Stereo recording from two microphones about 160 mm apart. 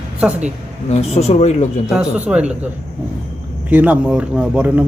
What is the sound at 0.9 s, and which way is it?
Speech, 40° left (ahead or behind).